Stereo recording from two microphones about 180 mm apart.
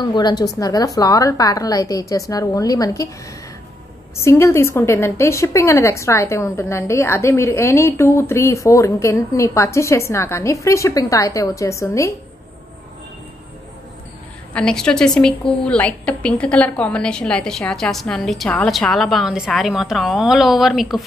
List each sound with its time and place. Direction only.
0.0 s a woman's voice: 25° left (ahead or behind)
4.2 s a woman's voice: 15° left (ahead or behind)
14.5 s a woman's voice: 5° left (ahead or behind)